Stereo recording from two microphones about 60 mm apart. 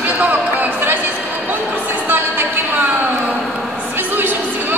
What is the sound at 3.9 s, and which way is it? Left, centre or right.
Music, right.